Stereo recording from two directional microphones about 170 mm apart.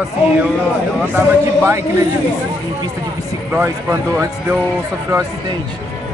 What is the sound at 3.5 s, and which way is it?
Speech, 15° right (ahead or behind).